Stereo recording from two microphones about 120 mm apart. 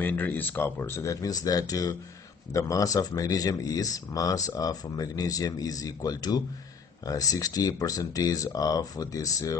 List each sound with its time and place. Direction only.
0.0 s speech: 15° left (ahead or behind)